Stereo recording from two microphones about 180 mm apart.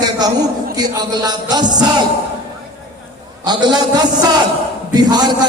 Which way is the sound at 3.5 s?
25° right (ahead or behind).